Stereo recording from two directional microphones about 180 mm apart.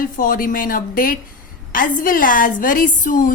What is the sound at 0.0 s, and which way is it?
Speech, 50° left (ahead or behind).